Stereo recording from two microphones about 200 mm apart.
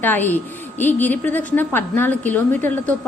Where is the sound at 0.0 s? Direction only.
10° left (ahead or behind).